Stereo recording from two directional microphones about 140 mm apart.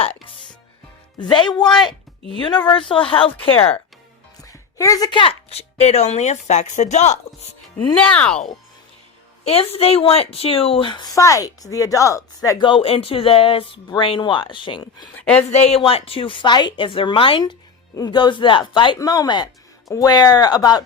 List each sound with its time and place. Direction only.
1.2 s a woman's voice: 30° left (ahead or behind)
1.6 s speech: 5° left (ahead or behind)
3.1 s a woman's voice: 40° left (ahead or behind)
4.4 s a woman's voice: 25° left (ahead or behind); by 7.2 s 55° left (ahead or behind)
8.0 s speech: 10° left (ahead or behind)
9.4 s a woman's voice: 45° left (ahead or behind); by 12.6 s 25° left (ahead or behind)
12.6 s a woman's voice: 40° left (ahead or behind)
15.1 s speech: 10° left (ahead or behind)
15.4 s a woman's voice: 50° left (ahead or behind); by 20.8 s 30° left (ahead or behind)